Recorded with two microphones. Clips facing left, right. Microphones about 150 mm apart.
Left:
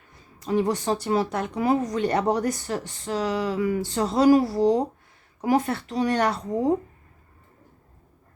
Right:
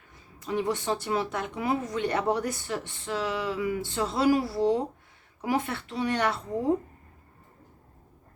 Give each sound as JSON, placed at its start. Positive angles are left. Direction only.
{"t": 0.3, "sound": "speech", "side_deg": 40}